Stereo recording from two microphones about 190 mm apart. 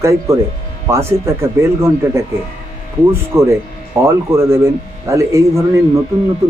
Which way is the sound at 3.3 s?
15° right (ahead or behind).